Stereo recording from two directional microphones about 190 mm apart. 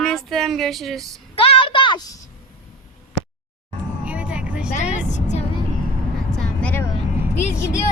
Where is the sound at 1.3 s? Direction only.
30° left (ahead or behind).